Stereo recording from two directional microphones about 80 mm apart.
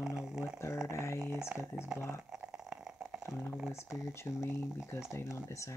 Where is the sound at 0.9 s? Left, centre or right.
Left.